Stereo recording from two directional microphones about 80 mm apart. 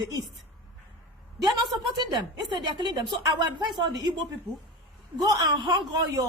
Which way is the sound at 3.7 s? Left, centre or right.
Right.